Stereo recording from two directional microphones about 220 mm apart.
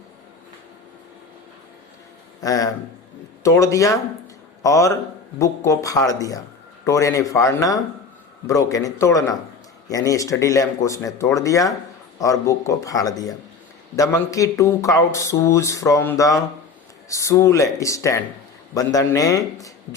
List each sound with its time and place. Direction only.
2.4 s speech: 15° left (ahead or behind)